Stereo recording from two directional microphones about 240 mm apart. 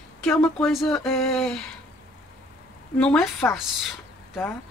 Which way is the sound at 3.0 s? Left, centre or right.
Centre.